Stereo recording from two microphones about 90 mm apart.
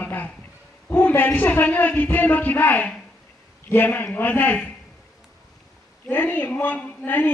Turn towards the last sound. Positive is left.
turn(degrees=20)  # may be behind; listen again after turning